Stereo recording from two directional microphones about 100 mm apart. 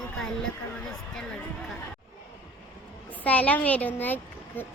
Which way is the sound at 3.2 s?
15° left (ahead or behind).